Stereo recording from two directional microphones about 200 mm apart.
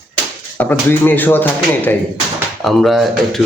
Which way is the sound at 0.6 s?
10° left (ahead or behind).